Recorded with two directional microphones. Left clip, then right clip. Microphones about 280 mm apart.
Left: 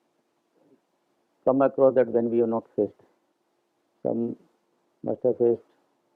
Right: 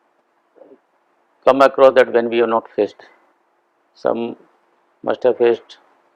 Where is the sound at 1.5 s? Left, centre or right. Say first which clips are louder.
Right 10 dB; centre.